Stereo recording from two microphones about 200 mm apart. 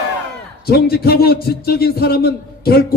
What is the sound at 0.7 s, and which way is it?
A man's voice, 50° left (ahead or behind).